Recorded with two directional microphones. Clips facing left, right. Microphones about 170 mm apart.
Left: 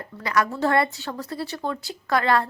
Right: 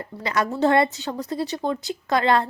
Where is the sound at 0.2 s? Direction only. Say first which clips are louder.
Right 1 dB; 20° right (ahead or behind).